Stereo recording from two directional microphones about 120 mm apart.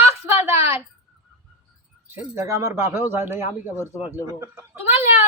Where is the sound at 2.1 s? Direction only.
25° right (ahead or behind).